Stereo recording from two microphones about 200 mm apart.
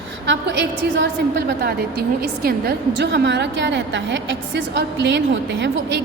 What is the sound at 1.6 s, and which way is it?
A woman's voice, 50° right (ahead or behind).